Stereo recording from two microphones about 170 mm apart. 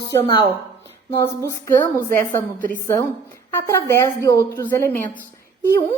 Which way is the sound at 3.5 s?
15° left (ahead or behind).